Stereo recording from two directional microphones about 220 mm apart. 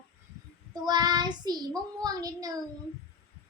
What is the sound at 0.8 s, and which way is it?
Child singing, 20° right (ahead or behind).